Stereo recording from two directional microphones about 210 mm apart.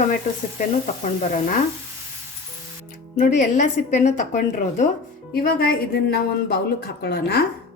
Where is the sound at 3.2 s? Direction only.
35° left (ahead or behind).